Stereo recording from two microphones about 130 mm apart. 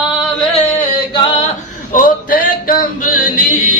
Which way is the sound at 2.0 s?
90° left.